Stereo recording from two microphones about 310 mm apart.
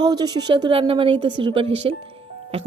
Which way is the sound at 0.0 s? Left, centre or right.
Centre.